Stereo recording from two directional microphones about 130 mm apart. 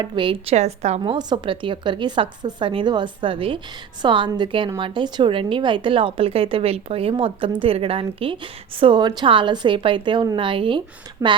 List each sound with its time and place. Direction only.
0.0 s a woman's voice: 40° right (ahead or behind)
0.5 s a woman's voice: 60° right (ahead or behind)
1.0 s a woman's voice: 40° right (ahead or behind)